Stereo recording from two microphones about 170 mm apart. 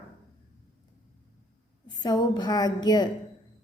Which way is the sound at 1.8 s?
25° left (ahead or behind).